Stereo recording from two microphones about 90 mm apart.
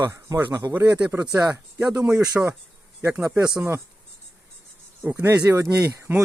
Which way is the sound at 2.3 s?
35° right (ahead or behind).